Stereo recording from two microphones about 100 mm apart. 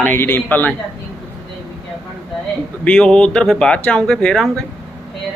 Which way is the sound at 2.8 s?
10° left (ahead or behind).